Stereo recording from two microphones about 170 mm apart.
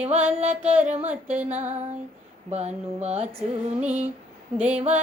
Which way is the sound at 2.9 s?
40° right (ahead or behind).